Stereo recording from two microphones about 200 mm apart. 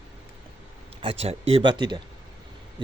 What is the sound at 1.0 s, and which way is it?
Speech, 30° right (ahead or behind).